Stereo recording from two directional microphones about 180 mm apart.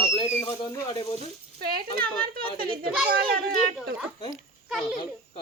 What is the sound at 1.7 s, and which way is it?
Speech, 55° right (ahead or behind).